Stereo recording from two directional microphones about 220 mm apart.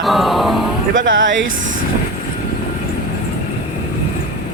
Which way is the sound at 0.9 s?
60° right (ahead or behind).